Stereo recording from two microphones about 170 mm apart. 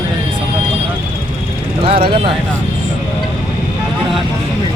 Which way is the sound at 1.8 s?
30° right (ahead or behind).